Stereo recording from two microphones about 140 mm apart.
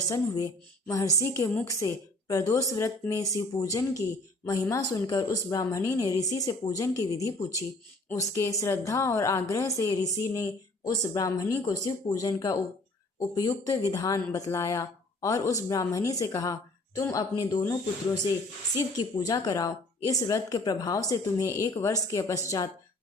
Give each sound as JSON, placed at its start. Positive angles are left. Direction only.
{"t": 0.9, "sound": "speech", "side_deg": 25}